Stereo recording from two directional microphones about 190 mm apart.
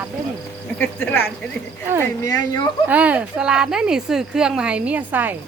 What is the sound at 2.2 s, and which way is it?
Speech, 20° left (ahead or behind).